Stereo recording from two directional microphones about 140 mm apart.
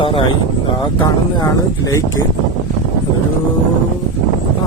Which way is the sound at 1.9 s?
25° left (ahead or behind).